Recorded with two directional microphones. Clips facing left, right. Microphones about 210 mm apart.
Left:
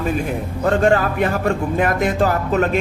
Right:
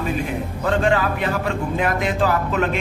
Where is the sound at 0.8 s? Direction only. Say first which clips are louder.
Left 4 dB; 45° left (ahead or behind).